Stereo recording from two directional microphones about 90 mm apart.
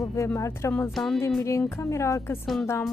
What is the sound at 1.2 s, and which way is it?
Speech, 35° left (ahead or behind).